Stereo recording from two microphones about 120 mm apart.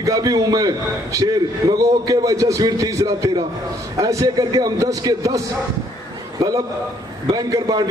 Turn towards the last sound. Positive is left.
turn(degrees=-30)  # may be behind; listen again after turning